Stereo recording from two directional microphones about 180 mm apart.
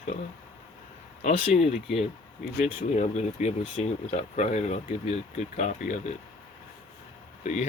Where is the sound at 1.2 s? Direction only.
45° left (ahead or behind).